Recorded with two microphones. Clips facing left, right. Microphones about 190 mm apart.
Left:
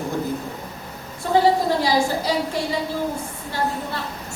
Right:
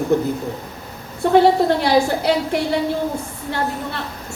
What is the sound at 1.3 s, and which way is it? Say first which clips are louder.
A woman's voice: right 4 dB; 65° right (ahead or behind).